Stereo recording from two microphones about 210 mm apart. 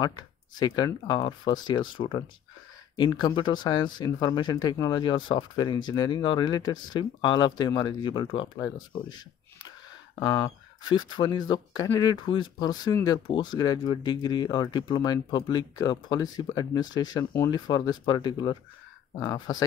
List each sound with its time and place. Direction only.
0.0 s speech: 20° left (ahead or behind)
10.1 s speech: 20° left (ahead or behind)